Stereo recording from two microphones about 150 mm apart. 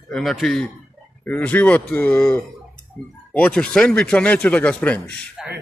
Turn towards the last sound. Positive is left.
turn(degrees=10)  # may be behind; listen again after turning